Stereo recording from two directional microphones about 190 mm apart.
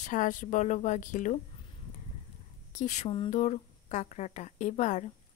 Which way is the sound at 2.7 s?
40° left (ahead or behind).